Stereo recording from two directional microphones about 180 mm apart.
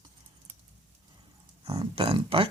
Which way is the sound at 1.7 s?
30° right (ahead or behind).